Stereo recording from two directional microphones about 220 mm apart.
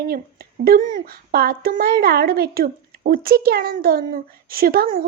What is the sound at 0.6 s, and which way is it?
A woman's voice, 40° right (ahead or behind).